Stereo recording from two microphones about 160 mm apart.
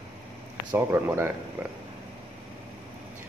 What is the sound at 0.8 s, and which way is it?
Speech, 15° right (ahead or behind).